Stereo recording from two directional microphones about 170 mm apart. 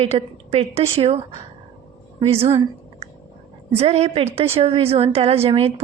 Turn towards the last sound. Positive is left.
turn(degrees=-35)  # may be behind; listen again after turning